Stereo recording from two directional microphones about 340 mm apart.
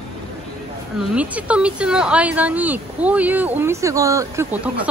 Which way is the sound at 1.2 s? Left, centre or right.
Centre.